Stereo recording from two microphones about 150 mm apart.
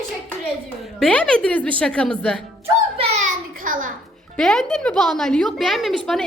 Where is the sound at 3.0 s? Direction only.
50° right (ahead or behind).